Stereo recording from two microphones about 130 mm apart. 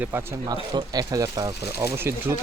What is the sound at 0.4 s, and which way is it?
Speech, 35° right (ahead or behind).